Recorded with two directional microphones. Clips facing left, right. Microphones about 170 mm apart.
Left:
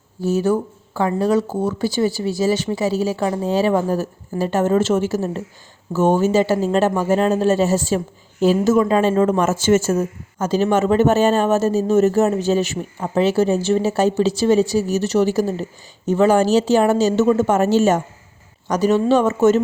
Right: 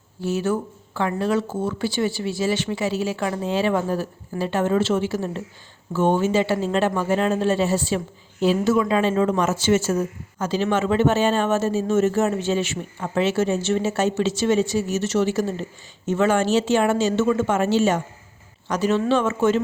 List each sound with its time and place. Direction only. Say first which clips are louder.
0.2 s speech: left 5 dB; 40° left (ahead or behind)